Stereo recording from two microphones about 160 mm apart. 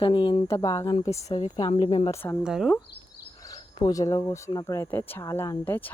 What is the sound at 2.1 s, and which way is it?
Speech, 15° left (ahead or behind).